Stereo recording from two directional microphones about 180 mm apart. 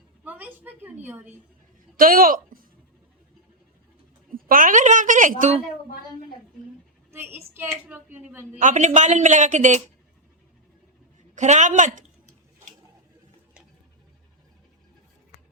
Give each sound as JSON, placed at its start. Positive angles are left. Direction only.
{"t": 0.3, "sound": "a woman's voice", "side_deg": -10}
{"t": 2.0, "sound": "speech", "side_deg": -50}
{"t": 4.4, "sound": "a woman's voice", "side_deg": -50}
{"t": 7.1, "sound": "a woman's voice", "side_deg": -15}
{"t": 8.5, "sound": "speech", "side_deg": -40}
{"t": 11.3, "sound": "speech", "side_deg": -40}